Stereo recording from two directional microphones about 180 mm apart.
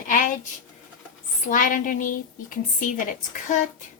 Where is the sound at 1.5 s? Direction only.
45° left (ahead or behind).